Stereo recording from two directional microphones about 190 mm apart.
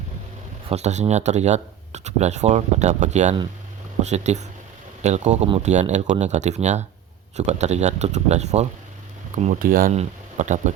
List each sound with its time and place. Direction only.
0.7 s speech: 35° right (ahead or behind)